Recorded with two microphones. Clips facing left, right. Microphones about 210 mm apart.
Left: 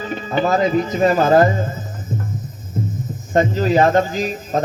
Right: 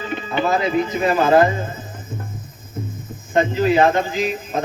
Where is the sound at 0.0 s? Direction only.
40° left (ahead or behind).